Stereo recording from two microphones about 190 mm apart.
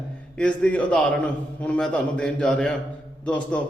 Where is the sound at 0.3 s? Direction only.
5° left (ahead or behind).